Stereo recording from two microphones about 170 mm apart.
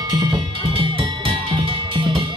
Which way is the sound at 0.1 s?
25° right (ahead or behind).